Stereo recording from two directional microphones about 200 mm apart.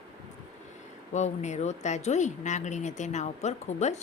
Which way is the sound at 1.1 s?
35° left (ahead or behind).